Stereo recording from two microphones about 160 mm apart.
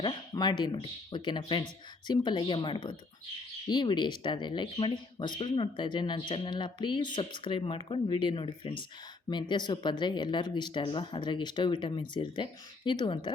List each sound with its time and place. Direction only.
0.0 s speech: 25° left (ahead or behind)